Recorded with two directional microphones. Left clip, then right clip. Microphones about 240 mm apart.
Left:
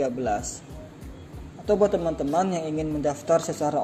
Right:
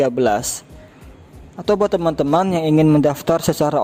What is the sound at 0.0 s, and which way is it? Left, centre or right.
Speech, right.